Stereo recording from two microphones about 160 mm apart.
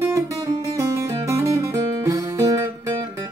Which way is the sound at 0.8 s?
20° right (ahead or behind).